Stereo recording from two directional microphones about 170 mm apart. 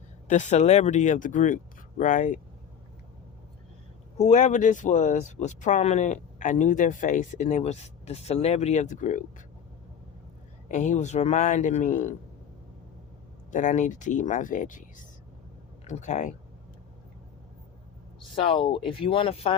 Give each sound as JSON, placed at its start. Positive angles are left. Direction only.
{"t": 0.3, "sound": "speech", "side_deg": 45}
{"t": 4.2, "sound": "speech", "side_deg": 45}
{"t": 10.7, "sound": "speech", "side_deg": 45}
{"t": 13.5, "sound": "speech", "side_deg": 45}
{"t": 18.2, "sound": "speech", "side_deg": 30}